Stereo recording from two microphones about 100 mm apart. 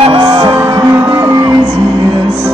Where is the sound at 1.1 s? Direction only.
35° right (ahead or behind).